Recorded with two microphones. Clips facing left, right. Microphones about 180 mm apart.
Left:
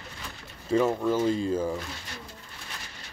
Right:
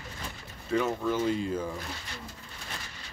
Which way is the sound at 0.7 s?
35° left (ahead or behind).